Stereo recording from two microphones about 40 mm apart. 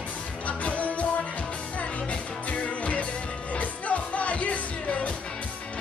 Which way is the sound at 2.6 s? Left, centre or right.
Left.